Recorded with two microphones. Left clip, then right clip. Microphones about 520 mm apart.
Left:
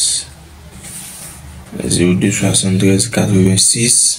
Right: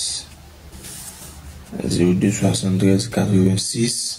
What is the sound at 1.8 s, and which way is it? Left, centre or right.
Speech, right.